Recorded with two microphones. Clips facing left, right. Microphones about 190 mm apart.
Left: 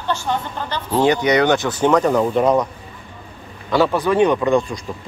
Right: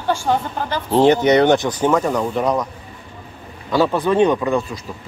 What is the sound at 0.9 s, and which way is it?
Speech, 25° right (ahead or behind).